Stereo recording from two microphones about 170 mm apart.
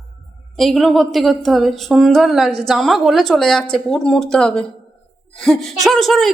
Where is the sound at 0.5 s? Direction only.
Centre (ahead or behind).